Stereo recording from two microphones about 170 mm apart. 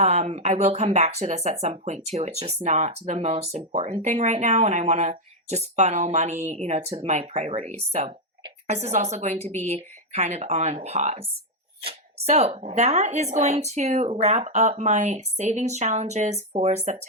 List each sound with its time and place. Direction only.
0.0 s speech: 40° right (ahead or behind)